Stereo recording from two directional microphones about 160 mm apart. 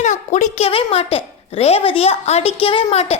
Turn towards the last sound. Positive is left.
turn(degrees=40)  # may be behind; listen again after turning